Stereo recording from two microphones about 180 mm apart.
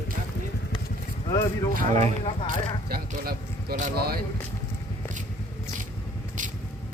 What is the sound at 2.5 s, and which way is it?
Speech, 55° right (ahead or behind).